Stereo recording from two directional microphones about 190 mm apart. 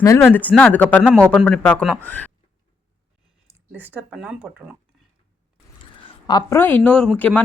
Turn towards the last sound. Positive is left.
turn(degrees=5)  # may be behind; listen again after turning